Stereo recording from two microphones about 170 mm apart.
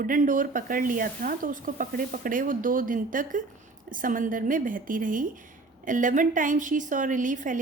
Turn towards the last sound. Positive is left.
turn(degrees=-50)  # may be behind; listen again after turning